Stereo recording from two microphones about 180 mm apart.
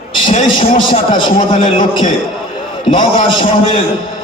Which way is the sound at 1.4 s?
30° left (ahead or behind).